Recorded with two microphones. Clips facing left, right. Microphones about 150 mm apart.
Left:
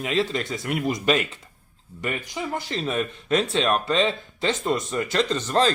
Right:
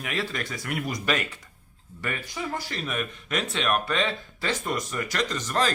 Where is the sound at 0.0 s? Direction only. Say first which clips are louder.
Left 6 dB; 25° left (ahead or behind).